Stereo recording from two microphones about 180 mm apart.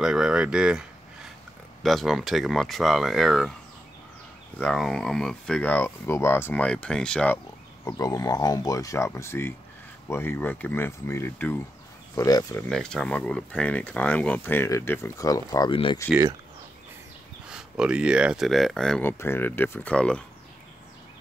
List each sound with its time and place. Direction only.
0.0 s a sound: 5° right (ahead or behind)
1.8 s speech: centre (ahead or behind)
4.6 s speech: 5° left (ahead or behind)
7.8 s speech: 20° left (ahead or behind)
12.6 s speech: 5° left (ahead or behind)
15.7 s speech: 30° left (ahead or behind)
16.1 s speech: 15° right (ahead or behind)
17.5 s speech: 5° right (ahead or behind)